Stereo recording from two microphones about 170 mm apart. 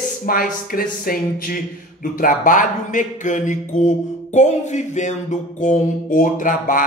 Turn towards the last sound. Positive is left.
turn(degrees=50)  # may be behind; listen again after turning